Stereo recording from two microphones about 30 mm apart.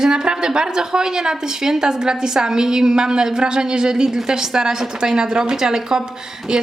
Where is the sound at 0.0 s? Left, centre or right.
Right.